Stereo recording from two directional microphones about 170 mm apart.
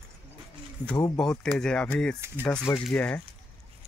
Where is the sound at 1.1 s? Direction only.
5° left (ahead or behind).